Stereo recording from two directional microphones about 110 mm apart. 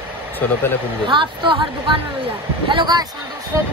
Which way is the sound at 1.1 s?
45° right (ahead or behind).